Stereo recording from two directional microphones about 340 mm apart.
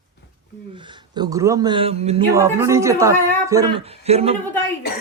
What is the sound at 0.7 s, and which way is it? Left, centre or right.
Speech, centre.